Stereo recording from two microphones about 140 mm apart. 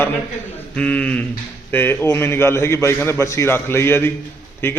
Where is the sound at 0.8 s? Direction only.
10° left (ahead or behind).